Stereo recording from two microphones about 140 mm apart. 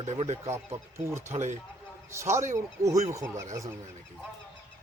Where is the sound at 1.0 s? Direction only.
20° right (ahead or behind).